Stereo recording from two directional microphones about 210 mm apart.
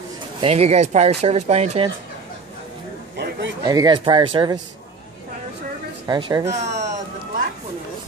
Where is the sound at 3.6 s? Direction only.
20° right (ahead or behind).